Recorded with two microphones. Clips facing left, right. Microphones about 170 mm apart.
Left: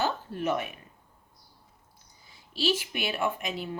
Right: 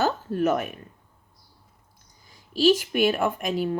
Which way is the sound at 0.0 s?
45° right (ahead or behind).